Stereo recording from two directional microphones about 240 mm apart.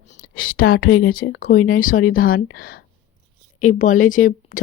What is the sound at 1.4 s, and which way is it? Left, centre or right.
Speech, left.